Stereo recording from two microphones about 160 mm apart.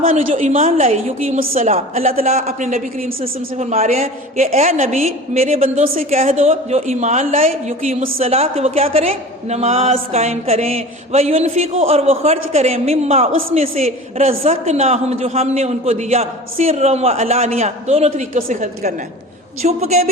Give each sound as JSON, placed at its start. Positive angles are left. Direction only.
{"t": 0.0, "sound": "a woman's voice", "side_deg": -55}
{"t": 18.3, "sound": "a woman's voice", "side_deg": -55}
{"t": 19.6, "sound": "a woman's voice", "side_deg": -45}